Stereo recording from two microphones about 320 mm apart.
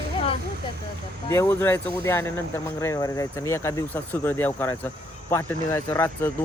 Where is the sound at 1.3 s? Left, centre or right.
Centre.